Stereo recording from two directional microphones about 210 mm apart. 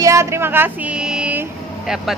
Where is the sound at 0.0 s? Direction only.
15° right (ahead or behind).